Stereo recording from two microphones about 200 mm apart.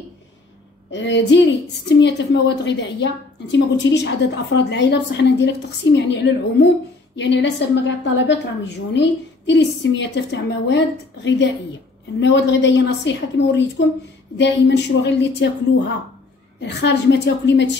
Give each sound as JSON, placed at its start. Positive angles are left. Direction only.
{"t": 0.9, "sound": "a woman's voice", "side_deg": 60}